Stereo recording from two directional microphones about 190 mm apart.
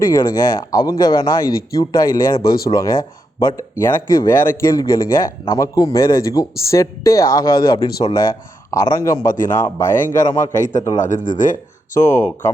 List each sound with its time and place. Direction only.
0.0 s speech: 15° left (ahead or behind)
9.3 s a man's voice: 45° left (ahead or behind)
10.8 s speech: 20° left (ahead or behind)
11.0 s a man's voice: 40° left (ahead or behind)
11.9 s speech: 15° left (ahead or behind)